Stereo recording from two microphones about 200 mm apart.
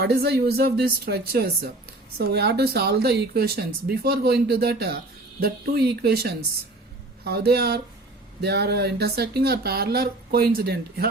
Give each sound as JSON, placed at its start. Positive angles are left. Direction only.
{"t": 0.0, "sound": "speech", "side_deg": -50}